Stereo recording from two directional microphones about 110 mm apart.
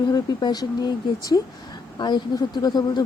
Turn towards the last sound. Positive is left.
turn(degrees=40)  # may be behind; listen again after turning